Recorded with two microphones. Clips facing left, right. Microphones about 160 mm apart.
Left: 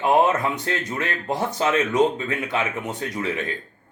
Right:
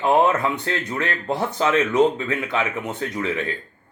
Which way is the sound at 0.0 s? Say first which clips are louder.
Right 1 dB; 15° left (ahead or behind).